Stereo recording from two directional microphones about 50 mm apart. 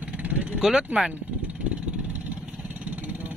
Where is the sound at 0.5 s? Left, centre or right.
Centre.